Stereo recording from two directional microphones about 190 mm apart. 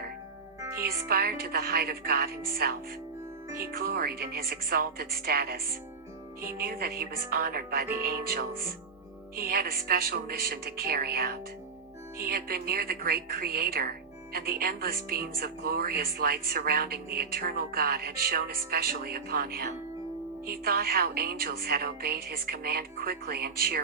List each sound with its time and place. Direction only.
0.8 s speech: 55° right (ahead or behind)